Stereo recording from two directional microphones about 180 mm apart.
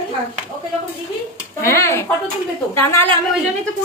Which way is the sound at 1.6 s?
15° left (ahead or behind).